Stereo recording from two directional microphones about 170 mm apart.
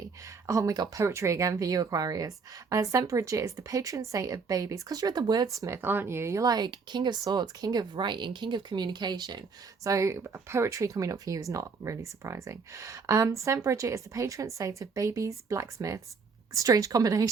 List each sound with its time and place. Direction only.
0.4 s speech: 20° right (ahead or behind)